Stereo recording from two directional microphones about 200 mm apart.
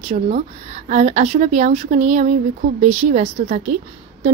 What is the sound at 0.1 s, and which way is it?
Speech, 40° right (ahead or behind).